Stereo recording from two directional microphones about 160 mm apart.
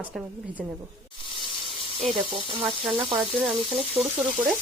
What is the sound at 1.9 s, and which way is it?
Speech, 35° right (ahead or behind).